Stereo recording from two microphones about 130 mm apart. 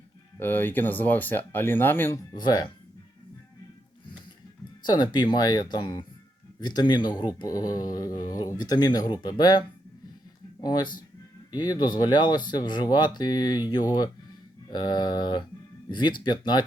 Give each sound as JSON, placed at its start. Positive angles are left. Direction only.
{"t": 0.3, "sound": "speech", "side_deg": 15}
{"t": 2.3, "sound": "speech", "side_deg": 30}
{"t": 4.8, "sound": "speech", "side_deg": 35}